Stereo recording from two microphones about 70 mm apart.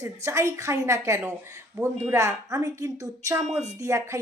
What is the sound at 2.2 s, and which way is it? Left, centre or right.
Speech, right.